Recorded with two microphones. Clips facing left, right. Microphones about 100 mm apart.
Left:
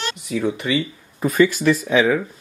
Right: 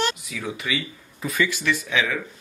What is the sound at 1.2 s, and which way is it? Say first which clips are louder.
Speech: left 9 dB; 45° left (ahead or behind).